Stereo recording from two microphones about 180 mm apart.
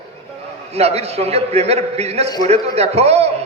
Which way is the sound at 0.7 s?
35° right (ahead or behind).